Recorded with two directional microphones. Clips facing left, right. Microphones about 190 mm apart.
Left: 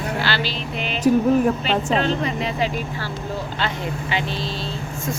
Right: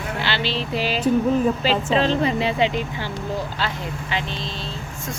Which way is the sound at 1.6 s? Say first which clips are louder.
Right 1 dB; 30° right (ahead or behind).